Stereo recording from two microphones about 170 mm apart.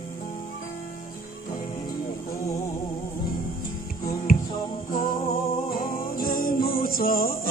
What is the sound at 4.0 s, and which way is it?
Music, 55° left (ahead or behind).